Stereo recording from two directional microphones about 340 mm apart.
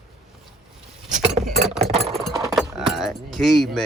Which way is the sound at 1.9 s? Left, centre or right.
Centre.